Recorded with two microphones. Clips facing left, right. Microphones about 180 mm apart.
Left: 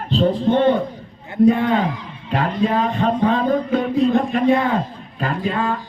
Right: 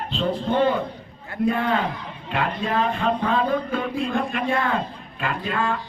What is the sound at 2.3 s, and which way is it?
Speech, 40° left (ahead or behind).